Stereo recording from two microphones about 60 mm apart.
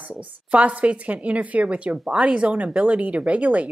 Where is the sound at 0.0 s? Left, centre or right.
Right.